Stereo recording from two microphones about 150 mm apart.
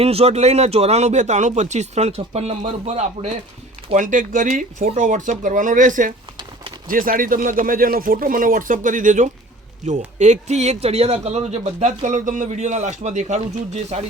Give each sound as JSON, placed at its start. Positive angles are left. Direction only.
{"t": 0.0, "sound": "speech", "side_deg": -40}
{"t": 3.9, "sound": "speech", "side_deg": -60}